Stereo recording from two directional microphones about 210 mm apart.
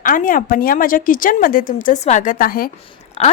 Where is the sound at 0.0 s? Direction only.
40° left (ahead or behind).